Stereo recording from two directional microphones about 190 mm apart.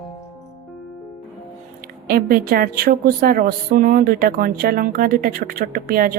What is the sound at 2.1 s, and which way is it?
A woman's voice, 50° right (ahead or behind).